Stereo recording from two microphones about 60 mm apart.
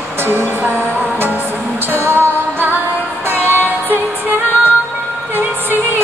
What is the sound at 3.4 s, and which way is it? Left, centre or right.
Music, left.